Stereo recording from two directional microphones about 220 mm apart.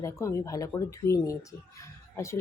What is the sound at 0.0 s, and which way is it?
Speech, 15° left (ahead or behind).